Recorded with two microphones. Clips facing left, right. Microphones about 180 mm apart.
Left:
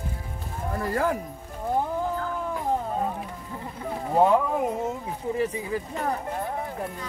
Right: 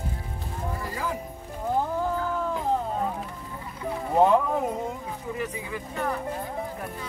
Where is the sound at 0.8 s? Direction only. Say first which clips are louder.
Left 9 dB; 60° left (ahead or behind).